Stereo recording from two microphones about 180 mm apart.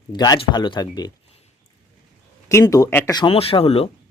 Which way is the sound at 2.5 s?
20° left (ahead or behind).